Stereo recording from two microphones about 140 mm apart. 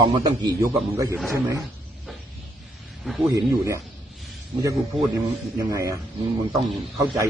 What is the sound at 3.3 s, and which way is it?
Speech, 20° right (ahead or behind).